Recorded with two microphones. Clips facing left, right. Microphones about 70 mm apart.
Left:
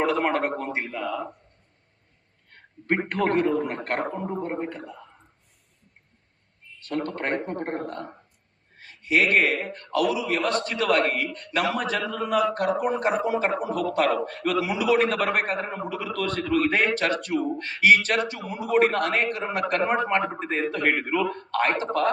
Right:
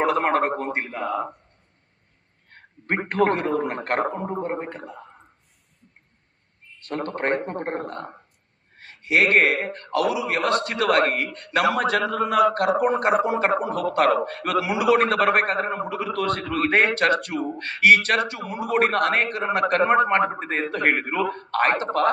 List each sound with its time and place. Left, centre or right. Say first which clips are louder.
0.0 s a sound: right 3 dB; right
0.9 s speech: right 3 dB; right
2.6 s a sound: left 1 dB; right
3.1 s a man's voice: right 3 dB; right
3.5 s a man's voice: right 2 dB; right
4.7 s a man's voice: right 1 dB; right
6.8 s a man's voice: right 2 dB; right
8.8 s speech: right 2 dB; right
10.0 s speech: right 1 dB; right
13.1 s a man's voice: right 3 dB; right